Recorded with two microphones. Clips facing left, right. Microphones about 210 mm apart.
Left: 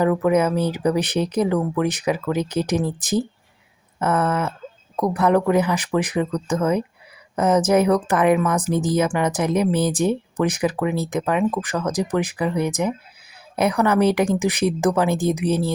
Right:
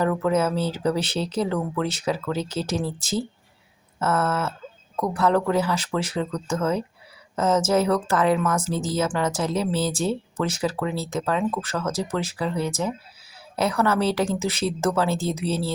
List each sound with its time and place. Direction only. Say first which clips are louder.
0.0 s speech: left 4 dB; 15° left (ahead or behind)